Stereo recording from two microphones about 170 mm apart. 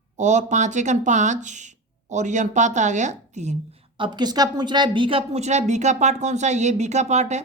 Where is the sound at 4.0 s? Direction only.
25° right (ahead or behind).